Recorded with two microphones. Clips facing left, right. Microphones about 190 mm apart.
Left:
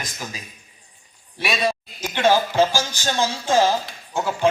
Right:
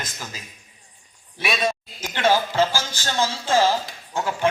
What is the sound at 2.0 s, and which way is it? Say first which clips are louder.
A man's voice: left 2 dB; 15° left (ahead or behind).